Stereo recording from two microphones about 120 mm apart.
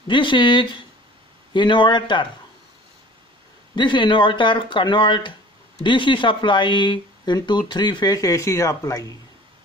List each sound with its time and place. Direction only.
0.1 s speech: 40° left (ahead or behind)
3.7 s speech: 40° left (ahead or behind)